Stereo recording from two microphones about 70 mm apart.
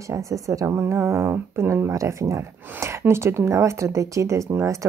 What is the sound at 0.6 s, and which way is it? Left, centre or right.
Speech, right.